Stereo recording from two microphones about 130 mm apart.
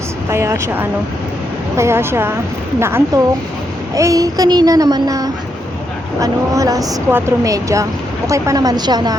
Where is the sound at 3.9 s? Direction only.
25° right (ahead or behind).